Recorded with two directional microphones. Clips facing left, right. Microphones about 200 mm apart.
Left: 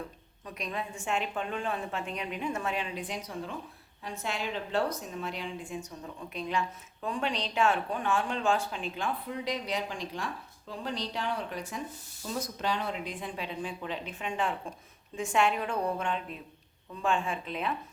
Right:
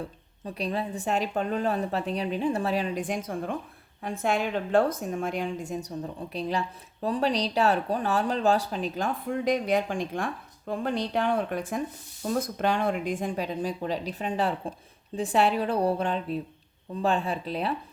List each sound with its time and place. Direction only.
0.4 s a woman's voice: 35° right (ahead or behind)